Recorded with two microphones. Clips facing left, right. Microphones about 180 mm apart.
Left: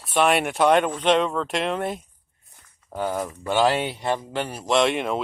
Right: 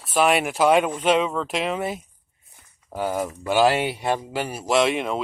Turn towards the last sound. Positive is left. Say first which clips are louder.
# even
turn(degrees=0)  # may be behind; listen again after turning